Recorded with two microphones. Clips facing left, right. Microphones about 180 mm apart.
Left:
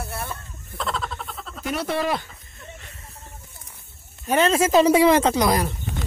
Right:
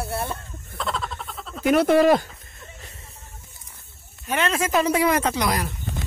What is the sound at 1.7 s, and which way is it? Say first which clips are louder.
Speech: right 9 dB; 50° right (ahead or behind).